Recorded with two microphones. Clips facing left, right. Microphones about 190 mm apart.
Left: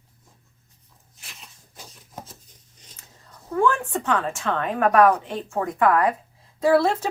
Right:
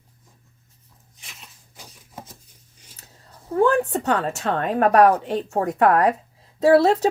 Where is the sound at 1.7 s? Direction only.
15° right (ahead or behind).